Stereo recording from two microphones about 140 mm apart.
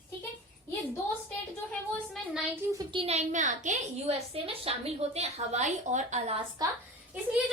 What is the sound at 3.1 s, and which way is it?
A woman's voice, 60° right (ahead or behind).